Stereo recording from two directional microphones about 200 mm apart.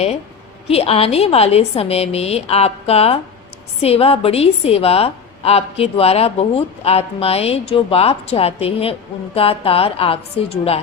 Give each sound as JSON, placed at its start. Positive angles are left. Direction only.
{"t": 0.7, "sound": "a woman's voice", "side_deg": 30}